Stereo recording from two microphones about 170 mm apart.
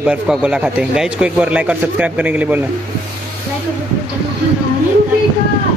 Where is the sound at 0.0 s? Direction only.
5° right (ahead or behind).